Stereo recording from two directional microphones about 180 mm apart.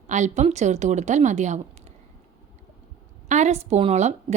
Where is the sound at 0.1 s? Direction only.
40° right (ahead or behind).